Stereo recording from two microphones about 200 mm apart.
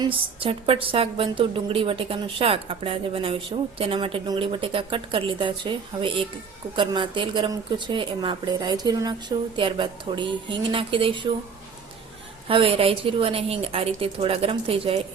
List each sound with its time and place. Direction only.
0.0 s a woman's voice: 25° right (ahead or behind)
12.5 s a woman's voice: 25° right (ahead or behind)